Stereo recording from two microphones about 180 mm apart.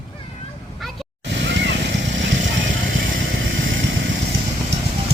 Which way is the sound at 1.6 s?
90° right.